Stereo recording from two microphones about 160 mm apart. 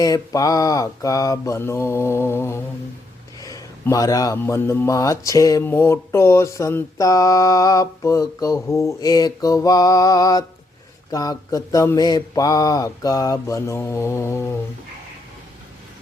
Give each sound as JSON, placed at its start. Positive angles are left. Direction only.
{"t": 0.0, "sound": "mantra", "side_deg": 20}
{"t": 3.4, "sound": "speech", "side_deg": 20}